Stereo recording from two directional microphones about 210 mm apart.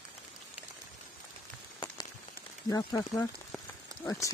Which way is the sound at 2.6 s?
15° left (ahead or behind).